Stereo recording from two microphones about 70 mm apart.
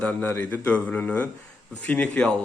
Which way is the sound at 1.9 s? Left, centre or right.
Centre.